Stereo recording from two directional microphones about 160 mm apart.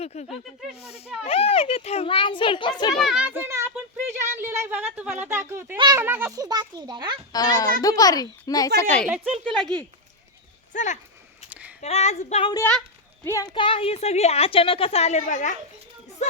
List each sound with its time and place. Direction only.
0.0 s a woman's voice: 40° left (ahead or behind)
2.9 s a woman's voice: centre (ahead or behind)
5.7 s a child's voice: 30° right (ahead or behind)
6.0 s a child's voice: 15° right (ahead or behind); by 7.2 s 30° right (ahead or behind)
7.3 s a child's voice: 20° left (ahead or behind)
9.0 s speech: 5° right (ahead or behind)
10.7 s speech: 50° left (ahead or behind)
11.4 s a sound: 10° right (ahead or behind)
11.8 s female singing: 45° left (ahead or behind)
13.2 s a child's voice: 20° left (ahead or behind)
13.5 s a woman's voice: 35° left (ahead or behind); by 15.5 s 50° left (ahead or behind)